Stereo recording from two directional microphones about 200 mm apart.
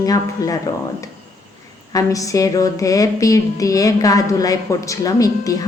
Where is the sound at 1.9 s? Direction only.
15° left (ahead or behind).